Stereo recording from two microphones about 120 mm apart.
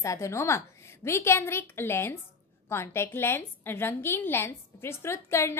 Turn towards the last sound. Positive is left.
turn(degrees=20)  # may be behind; listen again after turning